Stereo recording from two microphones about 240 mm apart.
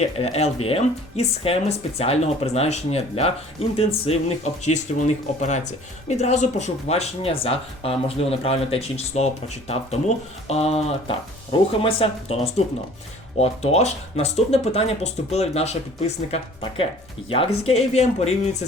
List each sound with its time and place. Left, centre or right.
0.0 s speech: left